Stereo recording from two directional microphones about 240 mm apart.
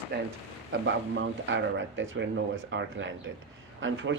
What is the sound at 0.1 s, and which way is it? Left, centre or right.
Speech, right.